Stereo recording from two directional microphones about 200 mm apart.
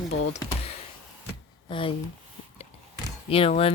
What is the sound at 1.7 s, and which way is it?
Speech, 25° left (ahead or behind).